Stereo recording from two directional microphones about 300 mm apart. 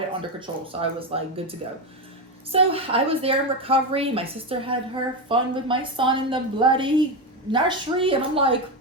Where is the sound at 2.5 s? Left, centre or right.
Centre.